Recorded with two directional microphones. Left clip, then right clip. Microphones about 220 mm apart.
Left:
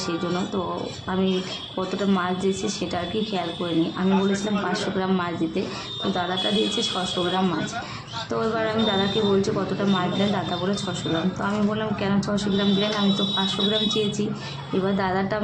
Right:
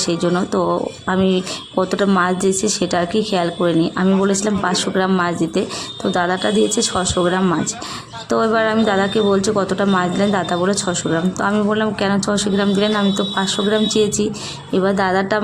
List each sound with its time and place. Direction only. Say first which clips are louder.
0.0 s a woman's voice: right 8 dB; 40° right (ahead or behind)